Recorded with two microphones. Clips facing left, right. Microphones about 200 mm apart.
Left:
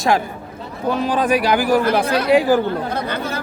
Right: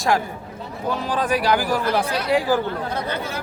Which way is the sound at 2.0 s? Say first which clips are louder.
Left 6 dB; 90° left.